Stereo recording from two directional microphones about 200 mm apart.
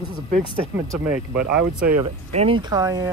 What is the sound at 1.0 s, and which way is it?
Speech, 5° right (ahead or behind).